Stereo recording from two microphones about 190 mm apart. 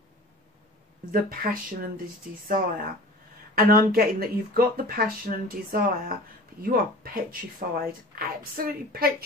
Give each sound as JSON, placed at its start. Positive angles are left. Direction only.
{"t": 1.4, "sound": "speech", "side_deg": -50}